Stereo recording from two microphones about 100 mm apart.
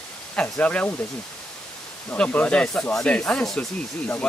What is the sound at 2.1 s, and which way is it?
Speech, 15° left (ahead or behind).